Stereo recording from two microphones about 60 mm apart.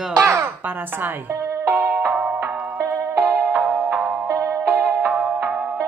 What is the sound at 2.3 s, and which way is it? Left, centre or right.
Music, right.